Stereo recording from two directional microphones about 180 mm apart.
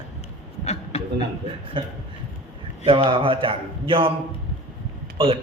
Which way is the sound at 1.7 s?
25° right (ahead or behind).